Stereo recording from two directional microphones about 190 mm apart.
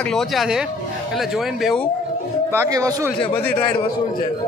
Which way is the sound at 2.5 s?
15° right (ahead or behind).